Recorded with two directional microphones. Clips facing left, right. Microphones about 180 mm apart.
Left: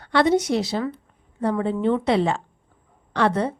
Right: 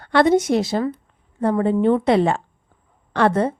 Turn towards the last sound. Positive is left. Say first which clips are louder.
# right 3 dB
turn(degrees=-50)  # may be behind; listen again after turning